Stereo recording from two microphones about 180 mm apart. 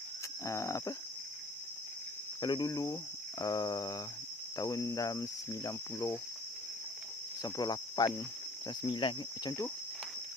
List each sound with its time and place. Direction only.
0.5 s cricket: 15° left (ahead or behind)
2.4 s cricket: 25° left (ahead or behind)
7.4 s cricket: 20° left (ahead or behind)